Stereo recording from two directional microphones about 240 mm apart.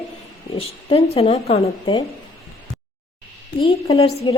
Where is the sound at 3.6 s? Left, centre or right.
Left.